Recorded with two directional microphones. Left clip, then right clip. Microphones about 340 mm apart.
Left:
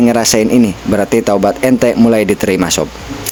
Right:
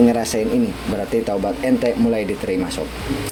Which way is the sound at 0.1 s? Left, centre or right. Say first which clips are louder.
Left 8 dB; left.